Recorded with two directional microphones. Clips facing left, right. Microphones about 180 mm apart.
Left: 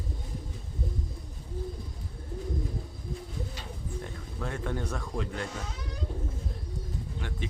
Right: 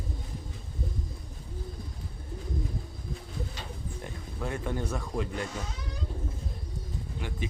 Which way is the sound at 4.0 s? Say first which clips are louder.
Right 2 dB; 5° right (ahead or behind).